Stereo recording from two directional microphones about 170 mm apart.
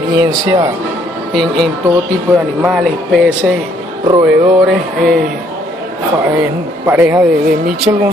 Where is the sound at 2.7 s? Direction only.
Centre (ahead or behind).